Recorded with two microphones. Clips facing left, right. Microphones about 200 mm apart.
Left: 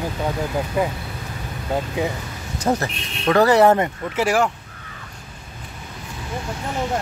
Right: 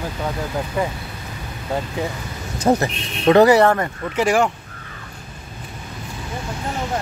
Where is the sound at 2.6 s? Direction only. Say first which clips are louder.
Right 4 dB; 20° right (ahead or behind).